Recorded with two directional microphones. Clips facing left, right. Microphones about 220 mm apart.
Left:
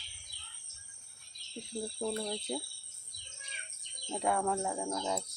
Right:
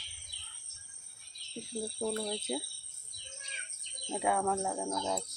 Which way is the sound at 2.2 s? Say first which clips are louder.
Right 1 dB; 5° right (ahead or behind).